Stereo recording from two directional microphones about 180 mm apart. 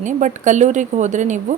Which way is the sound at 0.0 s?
45° right (ahead or behind).